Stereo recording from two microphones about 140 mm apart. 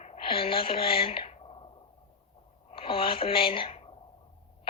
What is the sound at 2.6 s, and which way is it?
Speech, 40° left (ahead or behind).